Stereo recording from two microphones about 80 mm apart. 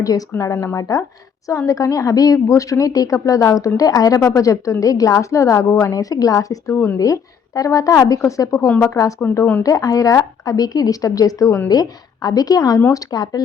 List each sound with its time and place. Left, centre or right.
0.0 s speech: left